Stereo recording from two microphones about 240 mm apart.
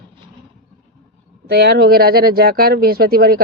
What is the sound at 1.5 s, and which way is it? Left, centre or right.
A man's voice, right.